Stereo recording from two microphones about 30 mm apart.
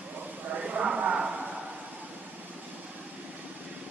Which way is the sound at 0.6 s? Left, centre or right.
Right.